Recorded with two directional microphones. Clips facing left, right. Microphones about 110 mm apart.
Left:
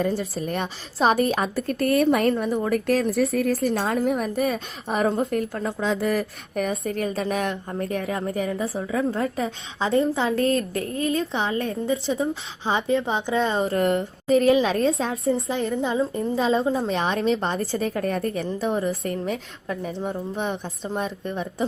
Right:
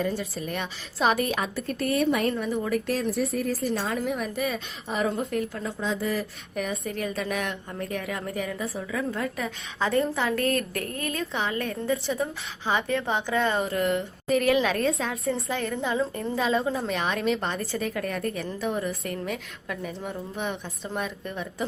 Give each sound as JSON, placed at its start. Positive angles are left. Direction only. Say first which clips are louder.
{"t": 0.0, "sound": "a woman's voice", "louder": "left 4 dB", "side_deg": 40}
{"t": 3.2, "sound": "a woman's voice", "louder": "left 5 dB", "side_deg": 75}
{"t": 5.8, "sound": "a woman's voice", "louder": "left 4 dB", "side_deg": 65}
{"t": 13.7, "sound": "a woman's voice", "louder": "left 4 dB", "side_deg": 40}
{"t": 14.3, "sound": "a woman's voice", "louder": "left 4 dB", "side_deg": 25}
{"t": 15.3, "sound": "a woman's voice", "louder": "left 5 dB", "side_deg": 20}